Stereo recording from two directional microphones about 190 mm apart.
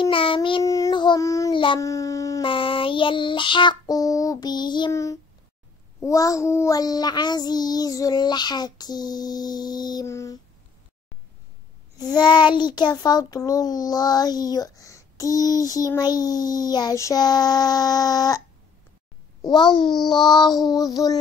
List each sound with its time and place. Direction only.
0.0 s child singing: 25° left (ahead or behind)
12.1 s child singing: 25° left (ahead or behind)
19.4 s child singing: 25° left (ahead or behind)